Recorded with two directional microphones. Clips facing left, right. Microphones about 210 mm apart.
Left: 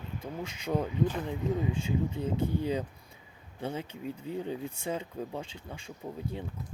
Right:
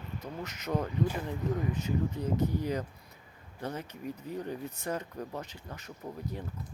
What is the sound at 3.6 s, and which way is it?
Speech, 25° left (ahead or behind).